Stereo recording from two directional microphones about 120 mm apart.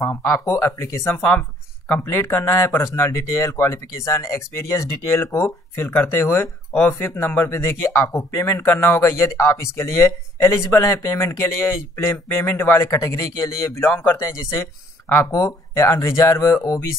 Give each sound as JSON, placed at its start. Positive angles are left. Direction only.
{"t": 0.0, "sound": "speech", "side_deg": 25}